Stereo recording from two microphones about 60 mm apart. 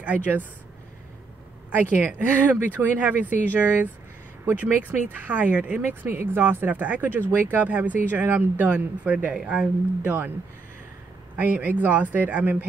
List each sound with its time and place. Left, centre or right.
0.0 s speech: right
2.0 s speech: right
8.6 s speech: right
9.3 s speech: centre
11.3 s speech: right